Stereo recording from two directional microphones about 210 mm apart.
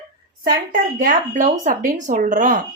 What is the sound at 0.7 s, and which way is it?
A woman's voice, 40° right (ahead or behind).